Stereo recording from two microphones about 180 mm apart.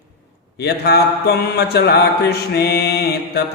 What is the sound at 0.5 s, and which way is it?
Mantra, 65° left (ahead or behind).